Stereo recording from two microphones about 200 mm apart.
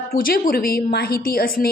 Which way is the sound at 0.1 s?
45° left (ahead or behind).